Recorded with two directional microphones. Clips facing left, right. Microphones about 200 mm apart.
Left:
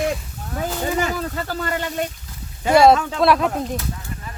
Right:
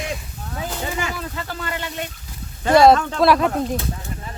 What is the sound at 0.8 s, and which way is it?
Speech, 40° left (ahead or behind).